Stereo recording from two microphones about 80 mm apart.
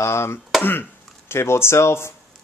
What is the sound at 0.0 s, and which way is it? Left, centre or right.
Speech, left.